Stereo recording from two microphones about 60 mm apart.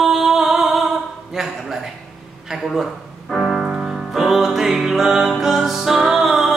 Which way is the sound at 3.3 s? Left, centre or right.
Centre.